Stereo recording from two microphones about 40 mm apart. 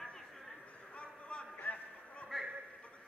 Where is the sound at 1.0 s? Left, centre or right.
Left.